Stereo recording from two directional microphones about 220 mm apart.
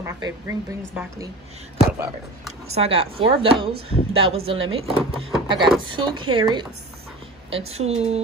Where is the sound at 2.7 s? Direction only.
25° right (ahead or behind).